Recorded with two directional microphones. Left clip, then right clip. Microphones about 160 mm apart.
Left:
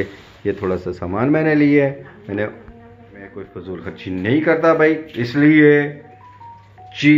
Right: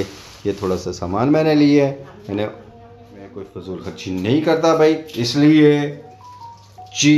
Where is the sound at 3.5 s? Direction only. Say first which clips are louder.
Even; 15° right (ahead or behind).